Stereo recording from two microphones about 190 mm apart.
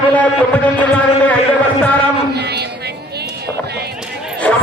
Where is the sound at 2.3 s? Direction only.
60° right (ahead or behind).